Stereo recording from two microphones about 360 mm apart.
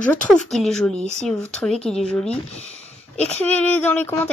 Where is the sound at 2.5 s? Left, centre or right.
Centre.